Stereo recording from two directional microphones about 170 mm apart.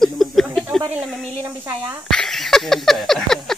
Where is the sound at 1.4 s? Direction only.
15° right (ahead or behind).